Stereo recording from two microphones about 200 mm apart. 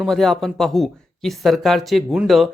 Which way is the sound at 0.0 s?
Centre (ahead or behind).